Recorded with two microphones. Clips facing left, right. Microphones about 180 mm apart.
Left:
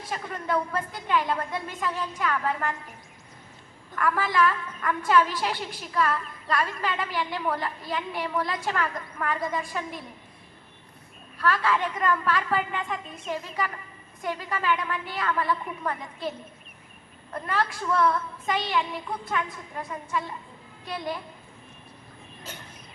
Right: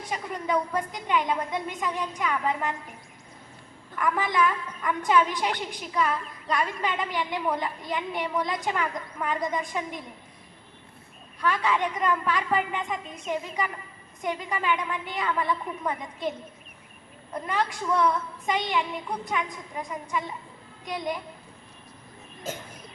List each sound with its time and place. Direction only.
0.1 s a woman's voice: 15° right (ahead or behind)
3.9 s a woman's voice: 15° right (ahead or behind)
11.3 s a woman's voice: 15° right (ahead or behind)
17.3 s a woman's voice: 15° right (ahead or behind)